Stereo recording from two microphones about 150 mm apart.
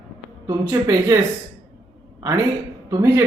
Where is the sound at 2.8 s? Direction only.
20° right (ahead or behind).